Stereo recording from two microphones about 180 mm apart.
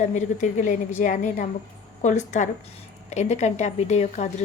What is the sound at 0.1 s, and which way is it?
A woman's voice, 40° left (ahead or behind).